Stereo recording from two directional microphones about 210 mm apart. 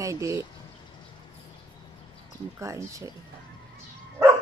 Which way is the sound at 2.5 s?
15° right (ahead or behind).